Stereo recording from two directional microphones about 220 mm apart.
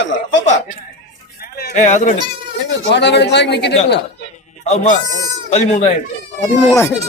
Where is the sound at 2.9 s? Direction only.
50° left (ahead or behind).